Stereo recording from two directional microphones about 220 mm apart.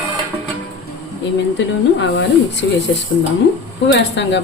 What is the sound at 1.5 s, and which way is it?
A woman's voice, 55° left (ahead or behind).